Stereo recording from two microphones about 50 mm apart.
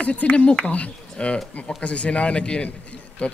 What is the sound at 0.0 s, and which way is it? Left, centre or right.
Speech, left.